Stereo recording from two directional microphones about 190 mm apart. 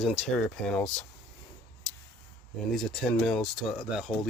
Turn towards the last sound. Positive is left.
turn(degrees=0)  # may be behind; listen again after turning